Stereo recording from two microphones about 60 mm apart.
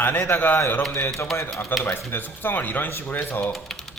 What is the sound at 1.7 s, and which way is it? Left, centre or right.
A man's voice, left.